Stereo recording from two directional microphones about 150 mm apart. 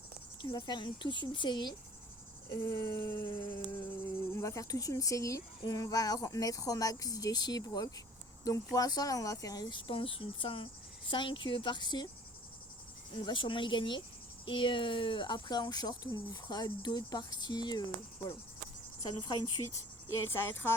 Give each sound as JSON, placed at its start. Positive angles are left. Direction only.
{"t": 0.4, "sound": "speech", "side_deg": 30}
{"t": 2.5, "sound": "a sound", "side_deg": 15}
{"t": 3.2, "sound": "speech", "side_deg": 35}
{"t": 3.8, "sound": "speech", "side_deg": 15}
{"t": 13.1, "sound": "speech", "side_deg": 35}
{"t": 20.2, "sound": "a sound", "side_deg": 15}